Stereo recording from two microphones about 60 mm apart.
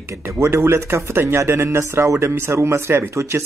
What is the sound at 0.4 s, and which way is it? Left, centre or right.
Speech, right.